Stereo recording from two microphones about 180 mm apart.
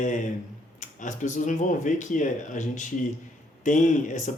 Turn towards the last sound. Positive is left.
turn(degrees=45)  # may be behind; listen again after turning